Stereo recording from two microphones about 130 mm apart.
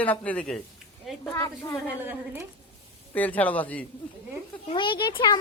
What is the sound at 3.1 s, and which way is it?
Speech, 10° left (ahead or behind).